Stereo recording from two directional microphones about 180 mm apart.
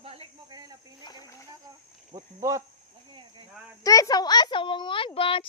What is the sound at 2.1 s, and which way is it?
Speech, 15° right (ahead or behind).